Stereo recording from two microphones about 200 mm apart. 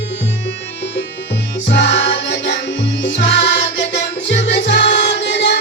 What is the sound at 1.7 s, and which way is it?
Music, 60° left (ahead or behind).